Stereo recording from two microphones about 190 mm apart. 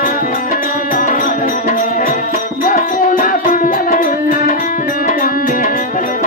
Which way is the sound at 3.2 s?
45° left (ahead or behind).